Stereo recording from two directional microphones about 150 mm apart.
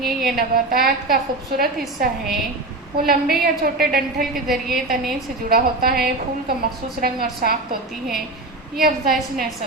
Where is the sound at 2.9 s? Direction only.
85° right.